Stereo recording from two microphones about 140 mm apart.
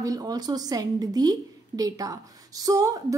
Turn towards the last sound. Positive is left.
turn(degrees=-25)  # may be behind; listen again after turning